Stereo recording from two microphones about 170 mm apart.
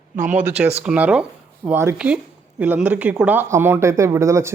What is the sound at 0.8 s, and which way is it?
Speech, 10° right (ahead or behind).